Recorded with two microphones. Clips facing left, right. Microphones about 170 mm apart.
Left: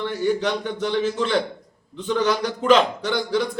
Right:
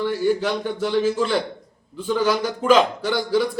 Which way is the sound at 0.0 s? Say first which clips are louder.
Right 2 dB; 5° right (ahead or behind).